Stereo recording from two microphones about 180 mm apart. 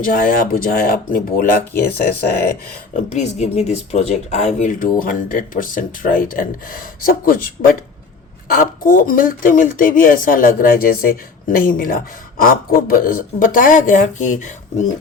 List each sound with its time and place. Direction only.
0.0 s speech: 50° left (ahead or behind)
2.9 s speech: 40° left (ahead or behind)